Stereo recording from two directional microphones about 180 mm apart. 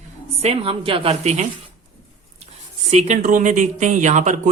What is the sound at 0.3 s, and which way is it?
A woman's voice, 35° right (ahead or behind).